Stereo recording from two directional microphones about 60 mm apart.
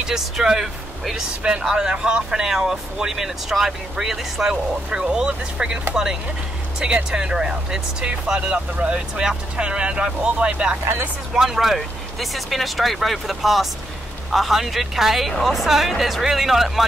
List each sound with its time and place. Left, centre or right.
0.0 s speech: centre
6.8 s speech: centre